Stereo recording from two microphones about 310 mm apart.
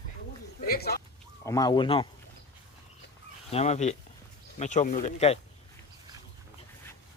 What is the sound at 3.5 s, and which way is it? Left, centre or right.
Speech, left.